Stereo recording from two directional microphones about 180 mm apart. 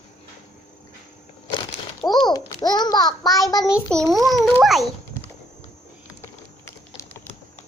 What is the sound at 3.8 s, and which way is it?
A child's voice, 5° left (ahead or behind).